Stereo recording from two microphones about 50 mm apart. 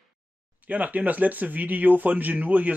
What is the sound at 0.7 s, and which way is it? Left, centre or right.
Speech, right.